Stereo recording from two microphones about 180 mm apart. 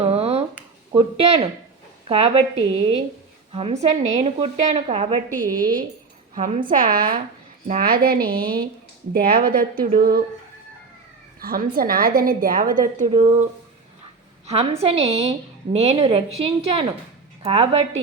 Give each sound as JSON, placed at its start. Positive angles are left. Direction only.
{"t": 0.0, "sound": "a sound", "side_deg": -35}
{"t": 1.2, "sound": "a woman's voice", "side_deg": -30}
{"t": 5.4, "sound": "a woman's voice", "side_deg": -50}
{"t": 11.3, "sound": "a woman's voice", "side_deg": -55}
{"t": 13.1, "sound": "a woman's voice", "side_deg": -35}
{"t": 14.4, "sound": "a woman's voice", "side_deg": -35}